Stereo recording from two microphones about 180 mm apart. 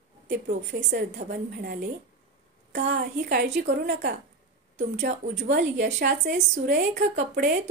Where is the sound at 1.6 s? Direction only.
60° right (ahead or behind).